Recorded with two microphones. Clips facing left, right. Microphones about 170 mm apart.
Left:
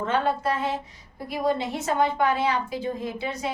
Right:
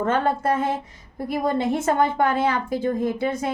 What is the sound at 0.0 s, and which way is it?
Speech, 50° right (ahead or behind).